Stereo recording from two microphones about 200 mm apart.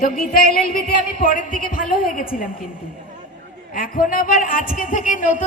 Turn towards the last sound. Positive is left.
turn(degrees=40)  # may be behind; listen again after turning